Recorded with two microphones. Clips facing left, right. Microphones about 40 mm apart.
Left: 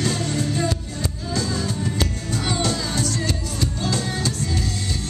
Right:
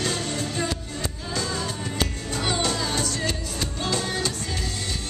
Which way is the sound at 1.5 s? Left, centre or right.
Right.